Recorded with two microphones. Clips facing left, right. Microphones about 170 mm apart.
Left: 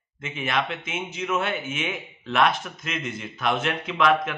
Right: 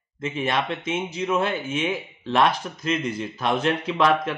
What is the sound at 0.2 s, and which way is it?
A man's voice, 35° right (ahead or behind).